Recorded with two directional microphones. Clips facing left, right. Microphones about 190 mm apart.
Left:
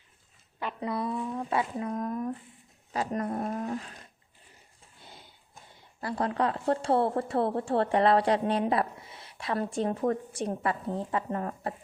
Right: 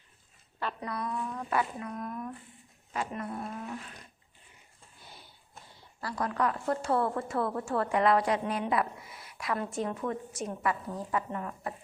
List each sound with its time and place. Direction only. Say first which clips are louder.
0.8 s speech: left 6 dB; 25° left (ahead or behind)
1.9 s a woman's voice: left 6 dB; 35° left (ahead or behind)
5.0 s a sound: left 2 dB; 20° left (ahead or behind)
6.0 s a woman's voice: left 2 dB; 25° left (ahead or behind)
11.3 s a woman's voice: left 4 dB; 40° left (ahead or behind)